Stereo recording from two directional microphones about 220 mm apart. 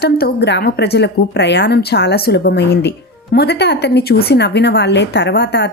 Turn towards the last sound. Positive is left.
turn(degrees=50)  # may be behind; listen again after turning